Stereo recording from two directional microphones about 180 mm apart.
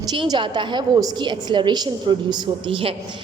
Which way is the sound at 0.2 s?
25° right (ahead or behind).